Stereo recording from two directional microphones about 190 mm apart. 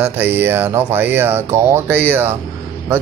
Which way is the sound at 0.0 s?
10° right (ahead or behind).